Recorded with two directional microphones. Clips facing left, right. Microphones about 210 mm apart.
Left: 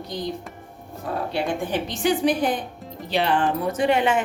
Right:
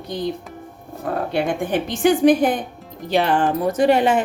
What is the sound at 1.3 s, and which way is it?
A woman's voice, 50° right (ahead or behind).